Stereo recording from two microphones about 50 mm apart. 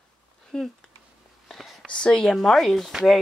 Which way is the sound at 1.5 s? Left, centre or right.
Centre.